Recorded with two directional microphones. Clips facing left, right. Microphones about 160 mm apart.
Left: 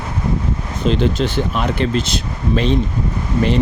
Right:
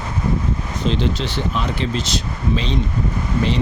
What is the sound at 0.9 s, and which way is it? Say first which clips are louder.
Speech: left 5 dB; 50° left (ahead or behind).